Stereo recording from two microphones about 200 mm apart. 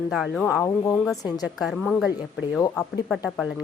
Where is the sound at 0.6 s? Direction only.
15° left (ahead or behind).